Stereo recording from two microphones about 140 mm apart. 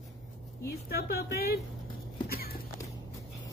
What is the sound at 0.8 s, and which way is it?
Speech, 90° left.